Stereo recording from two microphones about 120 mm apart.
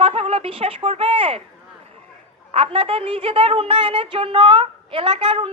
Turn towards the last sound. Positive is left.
turn(degrees=-50)  # may be behind; listen again after turning